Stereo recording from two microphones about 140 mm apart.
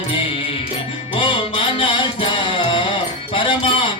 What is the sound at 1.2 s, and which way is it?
Music, 40° left (ahead or behind).